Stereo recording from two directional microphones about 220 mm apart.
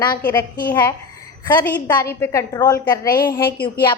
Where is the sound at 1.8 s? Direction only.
15° left (ahead or behind).